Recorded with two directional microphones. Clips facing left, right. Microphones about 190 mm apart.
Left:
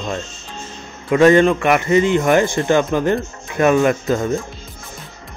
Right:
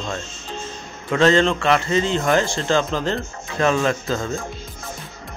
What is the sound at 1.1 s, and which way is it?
Speech, 15° left (ahead or behind).